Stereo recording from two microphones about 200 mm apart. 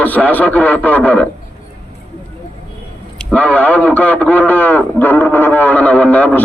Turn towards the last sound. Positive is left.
turn(degrees=10)  # may be behind; listen again after turning